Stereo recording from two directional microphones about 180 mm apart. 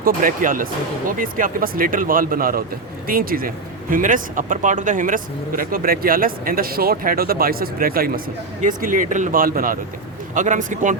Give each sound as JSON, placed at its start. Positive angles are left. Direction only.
{"t": 0.0, "sound": "speech", "side_deg": -50}